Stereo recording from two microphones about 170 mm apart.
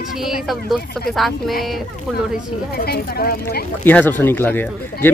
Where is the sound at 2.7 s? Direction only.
65° left (ahead or behind).